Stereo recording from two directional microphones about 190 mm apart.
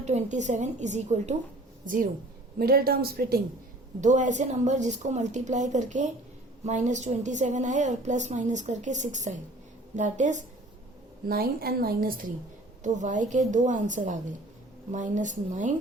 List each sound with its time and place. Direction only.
0.0 s a woman's voice: 40° right (ahead or behind)
2.6 s a woman's voice: 55° right (ahead or behind)
4.0 s a woman's voice: 40° right (ahead or behind)
11.3 s a woman's voice: 50° right (ahead or behind)